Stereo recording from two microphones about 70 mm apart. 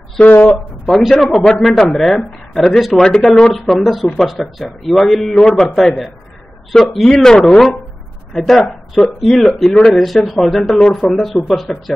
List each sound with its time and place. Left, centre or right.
0.2 s speech: left
1.1 s speech: centre